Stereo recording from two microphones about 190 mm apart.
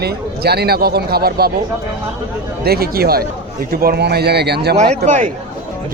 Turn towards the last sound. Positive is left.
turn(degrees=-40)  # may be behind; listen again after turning